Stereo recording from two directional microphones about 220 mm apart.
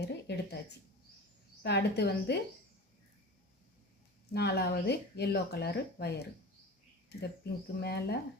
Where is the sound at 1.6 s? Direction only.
50° left (ahead or behind).